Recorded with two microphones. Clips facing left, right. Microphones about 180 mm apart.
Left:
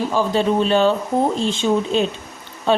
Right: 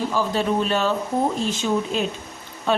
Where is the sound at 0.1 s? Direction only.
25° left (ahead or behind).